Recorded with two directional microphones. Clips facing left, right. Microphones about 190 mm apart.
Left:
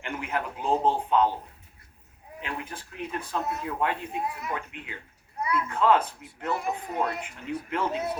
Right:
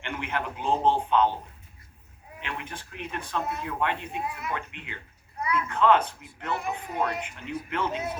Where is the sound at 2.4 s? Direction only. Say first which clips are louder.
Left 1 dB; 40° left (ahead or behind).